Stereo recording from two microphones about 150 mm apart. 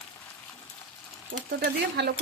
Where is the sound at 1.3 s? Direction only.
90° right.